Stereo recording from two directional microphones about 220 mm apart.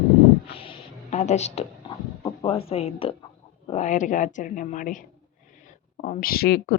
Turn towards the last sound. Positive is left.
turn(degrees=45)  # may be behind; listen again after turning